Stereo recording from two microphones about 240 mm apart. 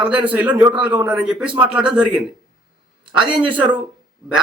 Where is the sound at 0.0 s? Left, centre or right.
Centre.